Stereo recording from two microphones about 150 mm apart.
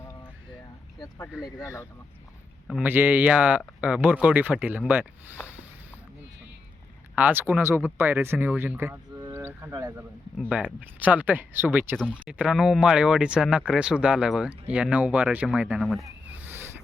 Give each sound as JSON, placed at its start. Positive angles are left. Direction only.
{"t": 0.9, "sound": "speech", "side_deg": 25}
{"t": 2.8, "sound": "speech", "side_deg": -15}
{"t": 7.2, "sound": "speech", "side_deg": -10}
{"t": 9.3, "sound": "a sound", "side_deg": -15}
{"t": 10.5, "sound": "speech", "side_deg": -10}
{"t": 16.3, "sound": "a sound", "side_deg": -15}